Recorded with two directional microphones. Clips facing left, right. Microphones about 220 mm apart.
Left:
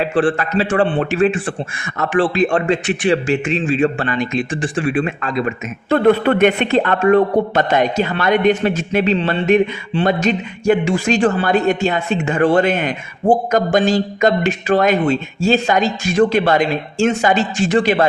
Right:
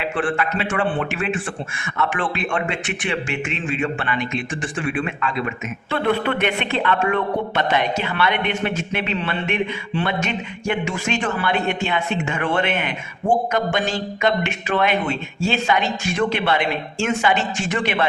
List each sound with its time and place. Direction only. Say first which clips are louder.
0.0 s speech: left 6 dB; 35° left (ahead or behind)